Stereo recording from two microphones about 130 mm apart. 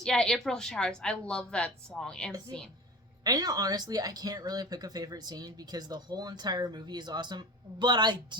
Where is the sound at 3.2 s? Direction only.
30° right (ahead or behind).